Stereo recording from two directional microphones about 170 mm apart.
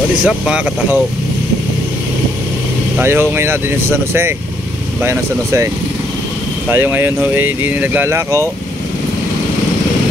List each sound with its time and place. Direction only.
0.2 s speech: 5° right (ahead or behind)
3.0 s speech: 15° right (ahead or behind)
6.7 s speech: 10° right (ahead or behind)